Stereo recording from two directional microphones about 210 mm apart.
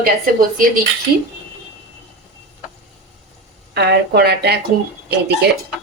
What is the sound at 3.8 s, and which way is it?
Speech, 50° right (ahead or behind).